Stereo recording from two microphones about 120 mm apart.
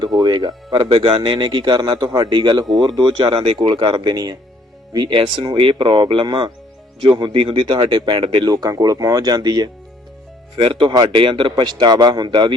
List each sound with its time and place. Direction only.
0.0 s speech: 35° right (ahead or behind)
0.9 s speech: 50° right (ahead or behind); by 9.6 s 35° right (ahead or behind)
10.6 s speech: 45° right (ahead or behind)